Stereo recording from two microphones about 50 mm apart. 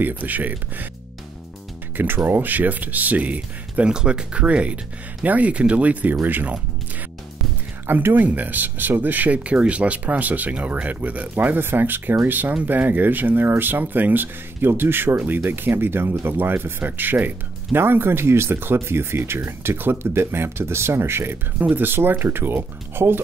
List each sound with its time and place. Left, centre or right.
0.0 s speech: right
2.0 s speech: right
6.2 s speech: right
7.8 s speech: right
21.5 s speech: right